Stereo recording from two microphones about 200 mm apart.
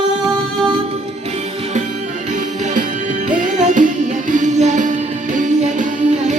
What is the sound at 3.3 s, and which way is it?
Music, 40° right (ahead or behind).